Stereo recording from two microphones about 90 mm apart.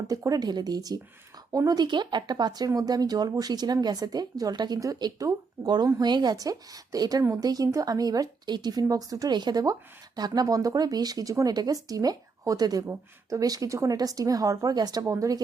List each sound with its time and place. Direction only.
0.2 s speech: 45° right (ahead or behind)
15.0 s a woman's voice: 35° right (ahead or behind)